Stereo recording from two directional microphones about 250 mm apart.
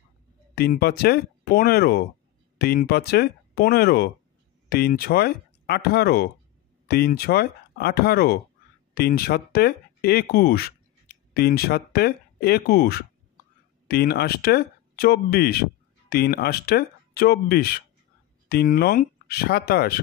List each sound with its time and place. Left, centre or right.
0.6 s speech: left